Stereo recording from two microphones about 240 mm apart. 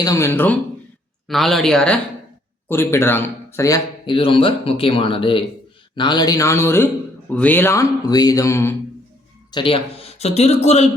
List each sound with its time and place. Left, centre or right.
0.0 s a man's voice: centre; by 10.8 s left